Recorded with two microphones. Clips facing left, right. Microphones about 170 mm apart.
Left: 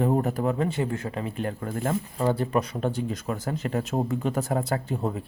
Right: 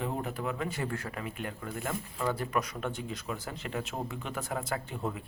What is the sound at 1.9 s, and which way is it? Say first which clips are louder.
Speech: left 7 dB; 30° left (ahead or behind).